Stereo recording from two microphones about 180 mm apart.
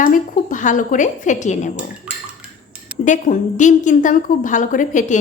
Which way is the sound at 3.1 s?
45° left (ahead or behind).